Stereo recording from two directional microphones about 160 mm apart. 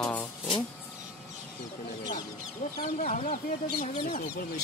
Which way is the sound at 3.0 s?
45° left (ahead or behind).